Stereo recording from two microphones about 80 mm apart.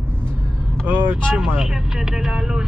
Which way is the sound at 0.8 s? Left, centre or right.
Right.